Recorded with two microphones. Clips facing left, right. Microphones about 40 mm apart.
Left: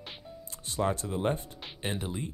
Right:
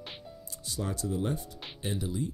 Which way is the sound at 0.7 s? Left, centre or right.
Left.